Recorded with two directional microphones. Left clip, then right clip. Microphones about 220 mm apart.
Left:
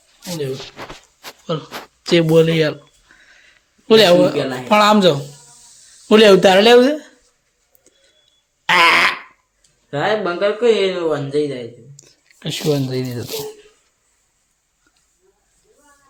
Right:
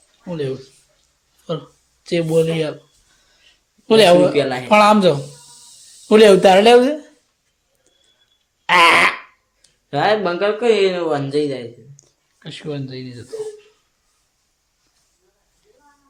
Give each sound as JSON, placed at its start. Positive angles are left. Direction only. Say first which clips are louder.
{"t": 1.5, "sound": "speech", "louder": "left 2 dB", "side_deg": 10}
{"t": 2.0, "sound": "speech", "louder": "left 4 dB", "side_deg": 25}
{"t": 3.8, "sound": "speech", "louder": "even", "side_deg": 5}
{"t": 8.6, "sound": "fart", "louder": "right 1 dB", "side_deg": 5}
{"t": 9.9, "sound": "speech", "louder": "right 2 dB", "side_deg": -20}
{"t": 12.4, "sound": "speech", "louder": "left 9 dB", "side_deg": 30}